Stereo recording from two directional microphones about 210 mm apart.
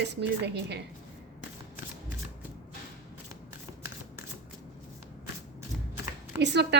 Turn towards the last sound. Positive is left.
turn(degrees=-55)  # may be behind; listen again after turning